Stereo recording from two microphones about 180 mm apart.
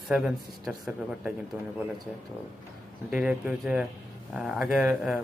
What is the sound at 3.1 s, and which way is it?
Speech, 10° right (ahead or behind).